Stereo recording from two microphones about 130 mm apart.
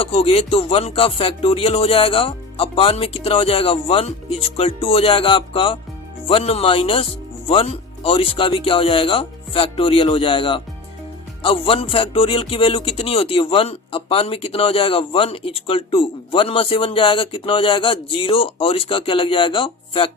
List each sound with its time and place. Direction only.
0.0 s speech: 45° left (ahead or behind)